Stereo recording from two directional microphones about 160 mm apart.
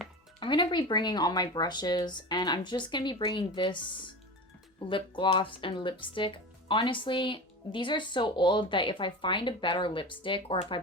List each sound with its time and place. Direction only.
0.3 s speech: 30° left (ahead or behind)